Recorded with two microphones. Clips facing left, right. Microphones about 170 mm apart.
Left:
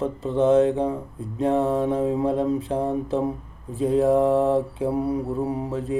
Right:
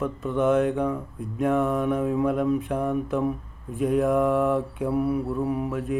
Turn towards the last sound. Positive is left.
turn(degrees=25)  # may be behind; listen again after turning